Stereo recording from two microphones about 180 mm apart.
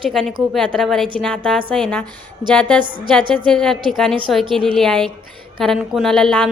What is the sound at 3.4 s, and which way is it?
A woman's voice, 5° left (ahead or behind).